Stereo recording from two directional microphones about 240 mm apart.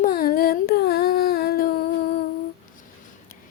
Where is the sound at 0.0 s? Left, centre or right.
Left.